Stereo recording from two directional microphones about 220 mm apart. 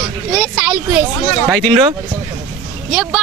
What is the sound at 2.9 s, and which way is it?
Speech, centre (ahead or behind).